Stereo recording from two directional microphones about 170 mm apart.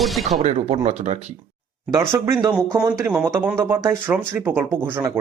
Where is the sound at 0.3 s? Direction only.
40° right (ahead or behind).